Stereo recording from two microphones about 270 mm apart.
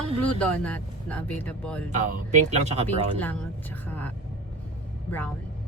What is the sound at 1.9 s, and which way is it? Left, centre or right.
Speech, right.